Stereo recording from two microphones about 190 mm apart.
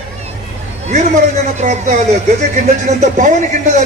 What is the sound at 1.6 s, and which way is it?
A man's voice, 35° right (ahead or behind).